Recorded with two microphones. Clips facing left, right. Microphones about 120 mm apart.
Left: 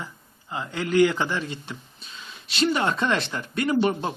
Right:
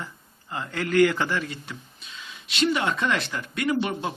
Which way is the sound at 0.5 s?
15° left (ahead or behind).